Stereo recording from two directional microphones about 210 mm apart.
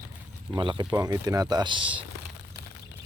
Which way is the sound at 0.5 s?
20° right (ahead or behind).